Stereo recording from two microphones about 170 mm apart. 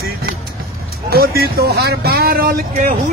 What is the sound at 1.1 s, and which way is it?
Speech, 65° right (ahead or behind).